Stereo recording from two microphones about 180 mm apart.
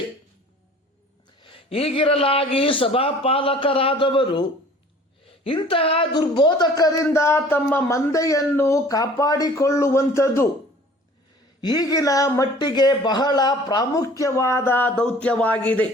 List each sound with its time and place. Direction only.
1.4 s a man's voice: 30° left (ahead or behind)
11.6 s speech: 20° left (ahead or behind)